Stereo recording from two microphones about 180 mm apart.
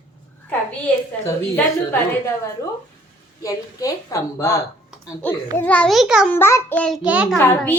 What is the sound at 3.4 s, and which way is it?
A woman's voice, 20° left (ahead or behind).